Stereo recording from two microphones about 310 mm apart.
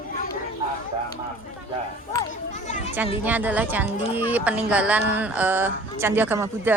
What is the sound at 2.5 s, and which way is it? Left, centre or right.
Children playing, left.